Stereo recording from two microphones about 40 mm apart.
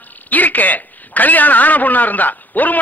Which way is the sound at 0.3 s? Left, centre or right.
Left.